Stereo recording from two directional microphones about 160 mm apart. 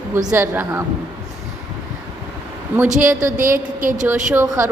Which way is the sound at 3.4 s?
60° right (ahead or behind).